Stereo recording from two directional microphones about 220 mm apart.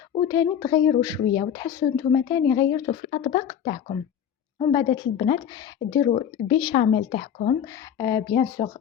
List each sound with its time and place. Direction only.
0.3 s speech: 15° left (ahead or behind)
7.9 s speech: 15° left (ahead or behind)